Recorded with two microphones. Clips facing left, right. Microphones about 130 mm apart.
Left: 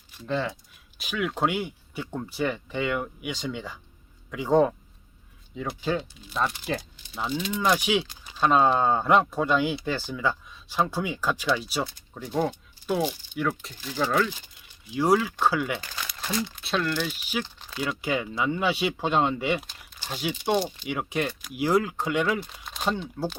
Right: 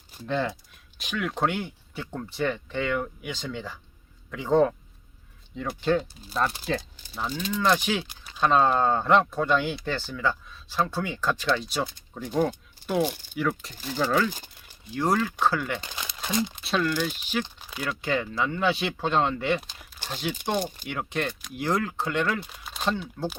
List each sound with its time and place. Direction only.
0.3 s speech: centre (ahead or behind)
8.0 s speech: 10° right (ahead or behind)
8.3 s speech: 10° left (ahead or behind)
12.5 s rattle: centre (ahead or behind)
13.3 s speech: centre (ahead or behind)
14.9 s speech: 10° left (ahead or behind)
15.8 s crumpling: 20° right (ahead or behind)
16.6 s speech: centre (ahead or behind)
17.4 s a sound: 15° right (ahead or behind)
17.8 s speech: 10° left (ahead or behind)
20.6 s speech: 50° right (ahead or behind)
20.8 s speech: 5° left (ahead or behind)
22.4 s crumpling: 5° right (ahead or behind)
23.2 s speech: 15° left (ahead or behind)